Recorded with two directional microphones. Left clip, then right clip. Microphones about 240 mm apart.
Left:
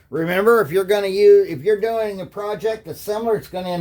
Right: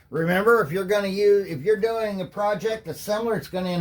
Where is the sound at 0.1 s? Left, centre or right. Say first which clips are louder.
Left 4 dB; left.